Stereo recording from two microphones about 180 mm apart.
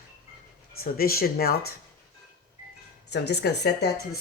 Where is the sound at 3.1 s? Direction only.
70° left (ahead or behind).